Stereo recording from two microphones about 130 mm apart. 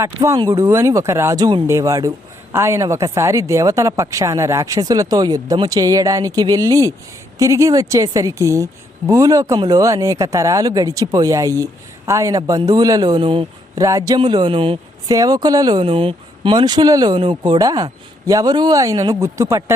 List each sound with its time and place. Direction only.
0.0 s a man's voice: 20° right (ahead or behind)
14.2 s speech: 35° right (ahead or behind)
15.1 s a man's voice: 30° right (ahead or behind)